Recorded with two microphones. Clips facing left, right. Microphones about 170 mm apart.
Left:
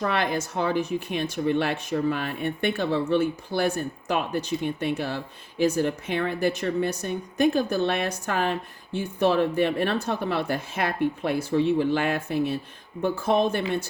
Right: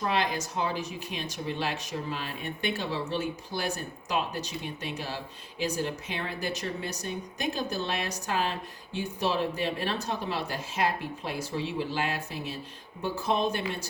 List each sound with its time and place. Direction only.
0.0 s speech: 55° left (ahead or behind)